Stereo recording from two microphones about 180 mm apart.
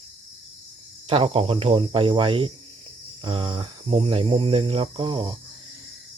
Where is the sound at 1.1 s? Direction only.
30° right (ahead or behind).